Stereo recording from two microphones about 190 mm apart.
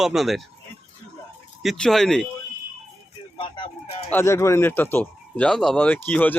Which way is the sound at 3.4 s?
25° left (ahead or behind).